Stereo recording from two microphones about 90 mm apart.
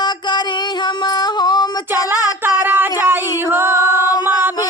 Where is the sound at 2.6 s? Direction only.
20° right (ahead or behind).